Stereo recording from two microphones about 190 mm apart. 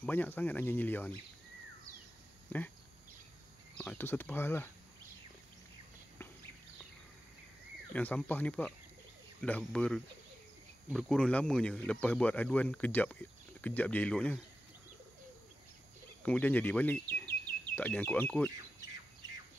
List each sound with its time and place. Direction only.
0.0 s speech: 10° left (ahead or behind)
2.5 s speech: 10° left (ahead or behind)
3.7 s speech: 10° left (ahead or behind)
7.9 s speech: 10° left (ahead or behind)
16.2 s speech: 5° left (ahead or behind)